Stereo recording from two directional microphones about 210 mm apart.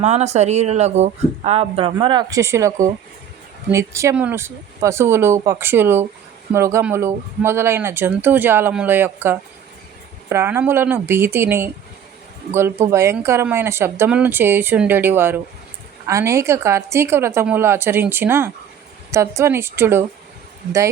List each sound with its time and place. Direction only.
0.0 s speech: 30° right (ahead or behind); by 20.1 s 10° right (ahead or behind)